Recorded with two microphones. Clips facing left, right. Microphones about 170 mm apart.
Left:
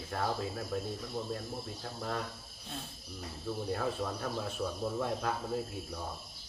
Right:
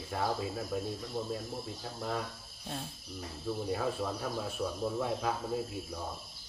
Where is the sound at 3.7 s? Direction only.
5° right (ahead or behind).